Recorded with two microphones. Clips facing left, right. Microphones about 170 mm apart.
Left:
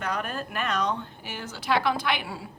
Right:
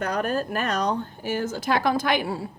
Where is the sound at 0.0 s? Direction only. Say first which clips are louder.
Right 6 dB; 40° right (ahead or behind).